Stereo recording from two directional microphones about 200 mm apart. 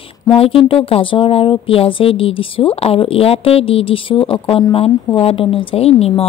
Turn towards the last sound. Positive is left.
turn(degrees=30)  # may be behind; listen again after turning